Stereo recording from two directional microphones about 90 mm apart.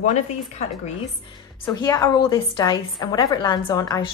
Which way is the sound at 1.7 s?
50° left (ahead or behind).